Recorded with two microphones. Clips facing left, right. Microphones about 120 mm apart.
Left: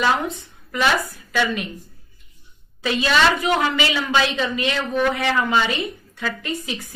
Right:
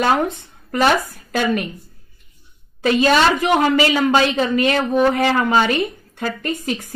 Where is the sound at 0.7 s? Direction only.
45° right (ahead or behind).